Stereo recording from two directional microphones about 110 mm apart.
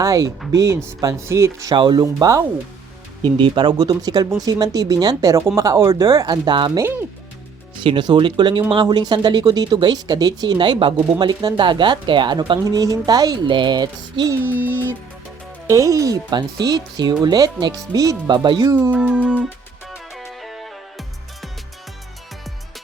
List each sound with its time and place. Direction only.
0.0 s speech: 30° right (ahead or behind)
1.7 s speech: 45° right (ahead or behind)
3.2 s speech: 45° right (ahead or behind)
12.6 s speech: 35° right (ahead or behind)
14.3 s speech: 20° right (ahead or behind)
14.7 s music: 20° left (ahead or behind)
15.6 s speech: 30° right (ahead or behind)
18.9 s music: 10° right (ahead or behind)